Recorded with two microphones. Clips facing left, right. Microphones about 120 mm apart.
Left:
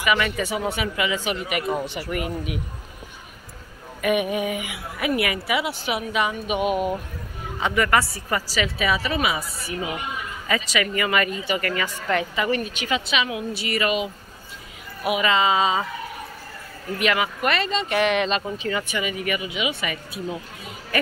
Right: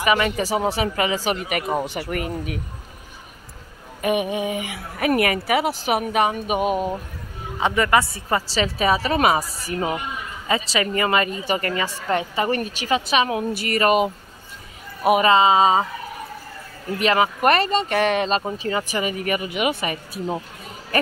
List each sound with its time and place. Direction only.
0.0 s speech: 30° right (ahead or behind)
2.0 s speech: 50° right (ahead or behind)
4.0 s speech: 30° right (ahead or behind)
7.6 s speech: 25° right (ahead or behind)
12.4 s speech: 40° right (ahead or behind)
17.0 s speech: 35° right (ahead or behind)
17.4 s speech: 45° right (ahead or behind)